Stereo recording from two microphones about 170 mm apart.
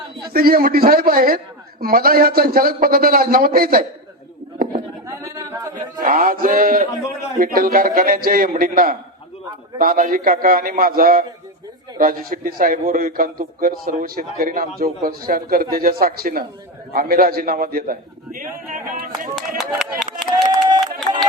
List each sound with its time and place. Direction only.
0.3 s a man's voice: 60° right (ahead or behind)
5.0 s singing: 20° right (ahead or behind)
6.0 s a man's voice: 55° right (ahead or behind)
19.5 s speech: centre (ahead or behind)
20.4 s a sound: 25° right (ahead or behind)